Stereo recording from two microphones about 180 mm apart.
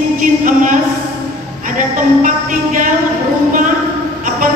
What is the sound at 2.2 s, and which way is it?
Music, 45° right (ahead or behind).